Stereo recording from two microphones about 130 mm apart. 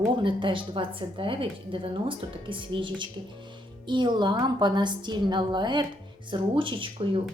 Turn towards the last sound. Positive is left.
turn(degrees=-40)  # may be behind; listen again after turning